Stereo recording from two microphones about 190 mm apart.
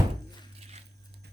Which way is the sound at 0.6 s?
35° right (ahead or behind).